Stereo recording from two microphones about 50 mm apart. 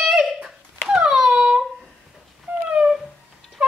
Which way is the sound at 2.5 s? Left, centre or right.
Right.